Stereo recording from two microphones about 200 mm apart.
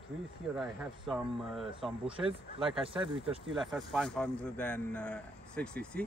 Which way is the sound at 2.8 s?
25° right (ahead or behind).